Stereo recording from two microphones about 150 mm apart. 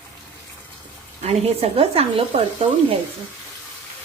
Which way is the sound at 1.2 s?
45° right (ahead or behind).